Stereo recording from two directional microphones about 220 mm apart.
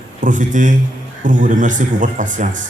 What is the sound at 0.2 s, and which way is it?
Speech, 35° right (ahead or behind).